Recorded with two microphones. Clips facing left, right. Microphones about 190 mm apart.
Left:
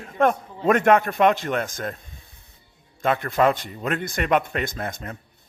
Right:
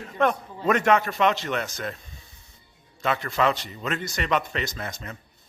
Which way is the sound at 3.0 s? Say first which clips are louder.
Left 4 dB; 50° left (ahead or behind).